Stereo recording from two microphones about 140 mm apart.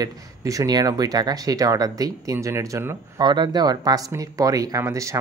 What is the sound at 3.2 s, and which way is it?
Speech, 30° right (ahead or behind).